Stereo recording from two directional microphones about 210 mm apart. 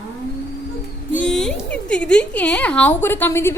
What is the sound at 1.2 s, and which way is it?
A woman's voice, 5° left (ahead or behind).